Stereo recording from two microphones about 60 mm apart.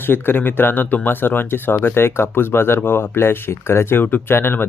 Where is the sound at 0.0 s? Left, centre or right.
Left.